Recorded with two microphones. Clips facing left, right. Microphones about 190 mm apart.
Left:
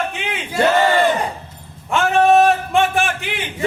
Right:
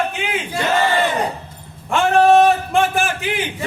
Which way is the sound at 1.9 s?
Centre (ahead or behind).